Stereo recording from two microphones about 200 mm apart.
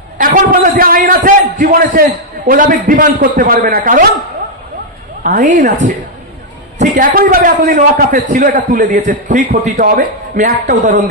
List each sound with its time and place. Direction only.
0.2 s a man's voice: 40° right (ahead or behind)
5.2 s a man's voice: 40° right (ahead or behind)